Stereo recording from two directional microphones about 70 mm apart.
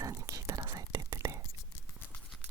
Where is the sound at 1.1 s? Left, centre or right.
Right.